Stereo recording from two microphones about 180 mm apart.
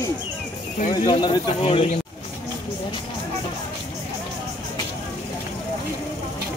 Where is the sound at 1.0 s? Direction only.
25° left (ahead or behind).